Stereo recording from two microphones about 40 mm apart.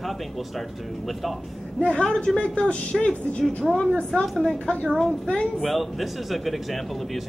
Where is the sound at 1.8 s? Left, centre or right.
Left.